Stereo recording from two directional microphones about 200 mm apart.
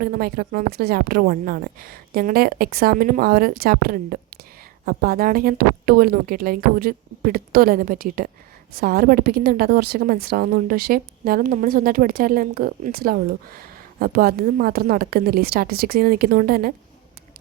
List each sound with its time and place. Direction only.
0.0 s a woman's voice: 45° right (ahead or behind)